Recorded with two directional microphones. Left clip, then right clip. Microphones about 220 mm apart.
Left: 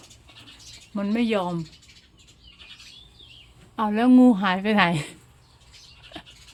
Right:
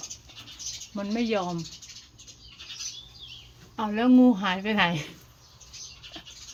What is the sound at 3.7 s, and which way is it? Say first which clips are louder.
A woman's voice: left 3 dB; 30° left (ahead or behind).